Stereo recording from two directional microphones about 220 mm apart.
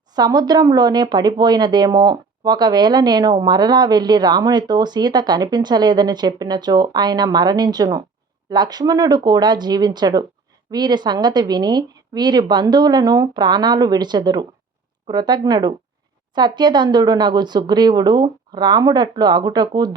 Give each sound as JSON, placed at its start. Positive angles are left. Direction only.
{"t": 0.1, "sound": "speech", "side_deg": -20}